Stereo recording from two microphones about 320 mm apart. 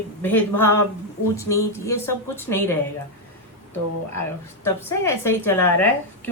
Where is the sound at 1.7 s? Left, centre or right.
Centre.